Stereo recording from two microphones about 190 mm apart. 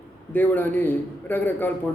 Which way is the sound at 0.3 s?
10° left (ahead or behind).